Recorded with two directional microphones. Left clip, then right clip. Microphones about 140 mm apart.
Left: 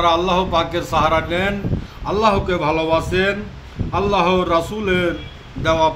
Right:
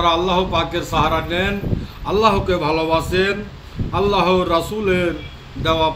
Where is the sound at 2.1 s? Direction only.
20° left (ahead or behind).